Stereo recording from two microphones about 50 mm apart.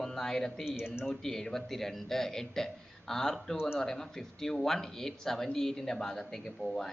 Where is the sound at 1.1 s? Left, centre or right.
Centre.